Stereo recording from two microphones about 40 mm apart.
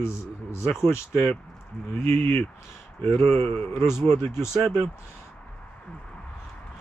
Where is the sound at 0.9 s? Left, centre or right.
Left.